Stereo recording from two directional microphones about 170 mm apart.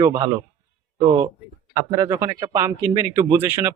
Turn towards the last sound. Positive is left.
turn(degrees=-15)  # may be behind; listen again after turning